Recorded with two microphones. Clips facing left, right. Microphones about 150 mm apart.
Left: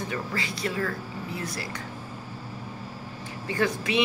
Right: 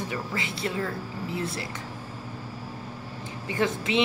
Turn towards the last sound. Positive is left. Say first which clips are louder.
# even
turn(degrees=-25)  # may be behind; listen again after turning